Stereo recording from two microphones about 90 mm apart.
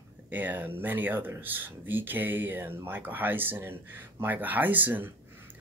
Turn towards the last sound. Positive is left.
turn(degrees=-20)  # may be behind; listen again after turning